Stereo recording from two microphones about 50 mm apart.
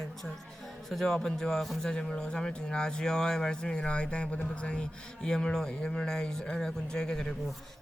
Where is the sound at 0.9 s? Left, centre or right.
Centre.